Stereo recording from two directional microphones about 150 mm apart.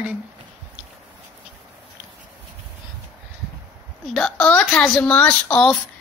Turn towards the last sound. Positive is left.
turn(degrees=5)  # may be behind; listen again after turning